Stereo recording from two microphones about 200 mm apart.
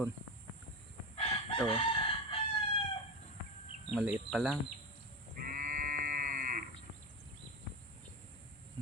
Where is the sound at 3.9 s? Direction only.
Centre (ahead or behind).